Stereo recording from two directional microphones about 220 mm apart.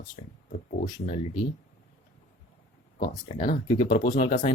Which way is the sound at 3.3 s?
35° left (ahead or behind).